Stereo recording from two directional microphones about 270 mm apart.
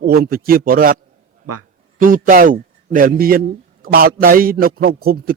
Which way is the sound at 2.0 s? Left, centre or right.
Right.